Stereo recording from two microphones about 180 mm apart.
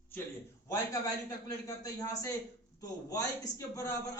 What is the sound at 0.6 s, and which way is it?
A man's voice, 20° left (ahead or behind).